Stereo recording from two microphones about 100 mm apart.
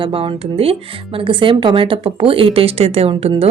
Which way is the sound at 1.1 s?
60° right (ahead or behind).